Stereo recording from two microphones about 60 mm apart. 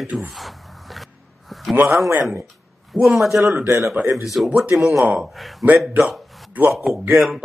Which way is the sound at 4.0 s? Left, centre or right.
Right.